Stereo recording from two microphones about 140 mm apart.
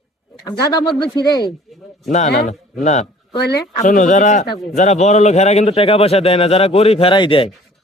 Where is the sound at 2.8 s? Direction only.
50° left (ahead or behind).